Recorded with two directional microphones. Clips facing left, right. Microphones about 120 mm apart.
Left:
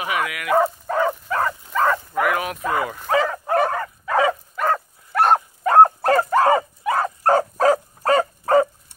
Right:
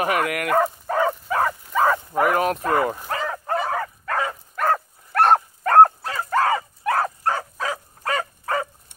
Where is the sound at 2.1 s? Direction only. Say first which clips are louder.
Right 2 dB; 40° right (ahead or behind).